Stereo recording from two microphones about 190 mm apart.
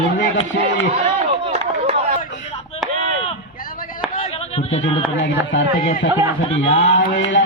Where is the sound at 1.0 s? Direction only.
35° right (ahead or behind).